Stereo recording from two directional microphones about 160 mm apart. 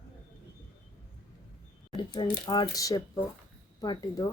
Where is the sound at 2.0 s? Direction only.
30° left (ahead or behind).